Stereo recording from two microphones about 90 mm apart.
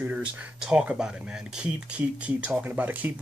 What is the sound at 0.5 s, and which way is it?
Speech, 10° right (ahead or behind).